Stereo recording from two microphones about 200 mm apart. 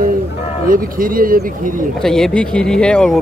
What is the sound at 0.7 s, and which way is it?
Speech, 45° right (ahead or behind).